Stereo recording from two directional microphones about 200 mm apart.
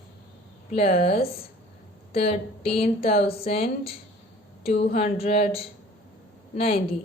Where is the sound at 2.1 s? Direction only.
30° left (ahead or behind).